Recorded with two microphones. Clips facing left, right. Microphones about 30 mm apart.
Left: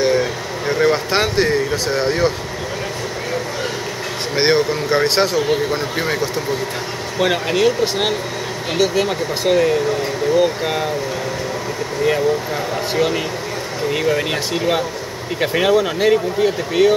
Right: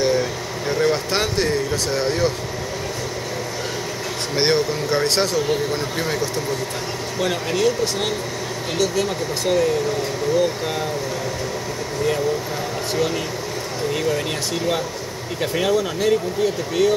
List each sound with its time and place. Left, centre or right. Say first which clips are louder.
0.0 s a sound: left 3 dB; centre
4.4 s speech: left 4 dB; centre
12.9 s speech: left 3 dB; left